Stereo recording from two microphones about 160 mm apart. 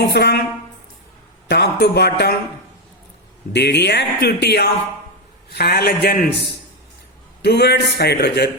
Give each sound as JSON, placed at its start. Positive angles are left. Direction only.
{"t": 0.1, "sound": "speech", "side_deg": 90}
{"t": 1.5, "sound": "speech", "side_deg": 90}
{"t": 3.5, "sound": "a man's voice", "side_deg": 90}
{"t": 7.4, "sound": "speech", "side_deg": 90}